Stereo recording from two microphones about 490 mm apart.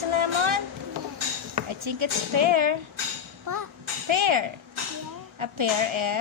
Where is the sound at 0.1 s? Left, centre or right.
Right.